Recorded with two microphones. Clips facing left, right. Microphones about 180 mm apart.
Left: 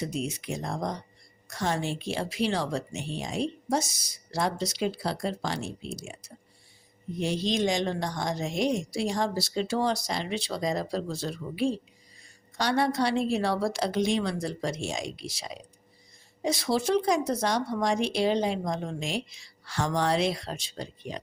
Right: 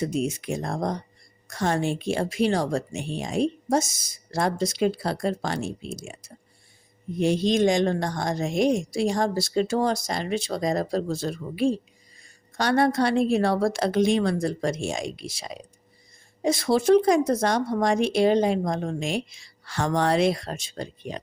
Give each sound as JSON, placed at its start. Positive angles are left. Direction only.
{"t": 0.0, "sound": "speech", "side_deg": -50}